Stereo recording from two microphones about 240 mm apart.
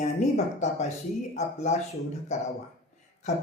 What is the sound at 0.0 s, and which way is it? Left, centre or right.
Speech, left.